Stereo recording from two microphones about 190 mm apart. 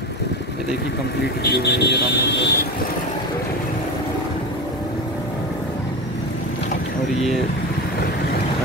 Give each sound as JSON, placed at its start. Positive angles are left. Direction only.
{"t": 1.4, "sound": "speech", "side_deg": 60}